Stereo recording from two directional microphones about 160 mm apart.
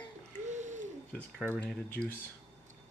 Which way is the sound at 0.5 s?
50° right (ahead or behind).